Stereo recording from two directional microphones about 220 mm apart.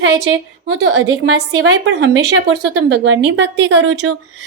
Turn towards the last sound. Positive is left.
turn(degrees=-60)  # may be behind; listen again after turning